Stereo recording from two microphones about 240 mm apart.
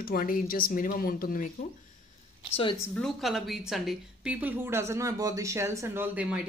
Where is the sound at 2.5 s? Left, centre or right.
Left.